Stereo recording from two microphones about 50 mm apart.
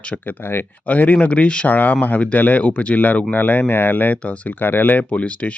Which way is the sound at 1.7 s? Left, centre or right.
Left.